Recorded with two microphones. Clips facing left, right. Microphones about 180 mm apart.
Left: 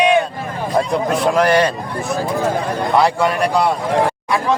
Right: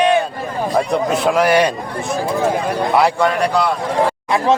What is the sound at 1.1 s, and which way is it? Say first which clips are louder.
Speech: even; centre (ahead or behind).